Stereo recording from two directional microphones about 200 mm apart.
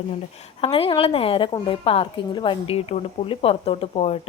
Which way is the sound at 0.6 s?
30° left (ahead or behind).